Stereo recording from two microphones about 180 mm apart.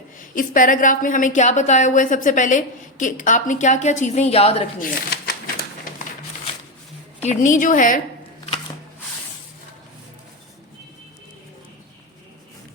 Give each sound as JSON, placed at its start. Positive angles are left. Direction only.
{"t": 0.2, "sound": "speech", "side_deg": 50}
{"t": 4.8, "sound": "speech", "side_deg": 60}
{"t": 7.2, "sound": "speech", "side_deg": 40}